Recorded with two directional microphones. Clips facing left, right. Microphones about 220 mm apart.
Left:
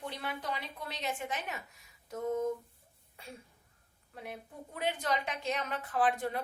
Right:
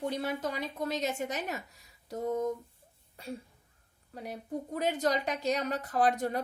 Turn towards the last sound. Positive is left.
turn(degrees=-40)  # may be behind; listen again after turning